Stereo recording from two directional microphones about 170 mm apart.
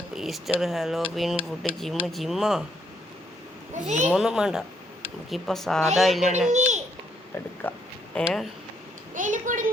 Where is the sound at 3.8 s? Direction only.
45° right (ahead or behind).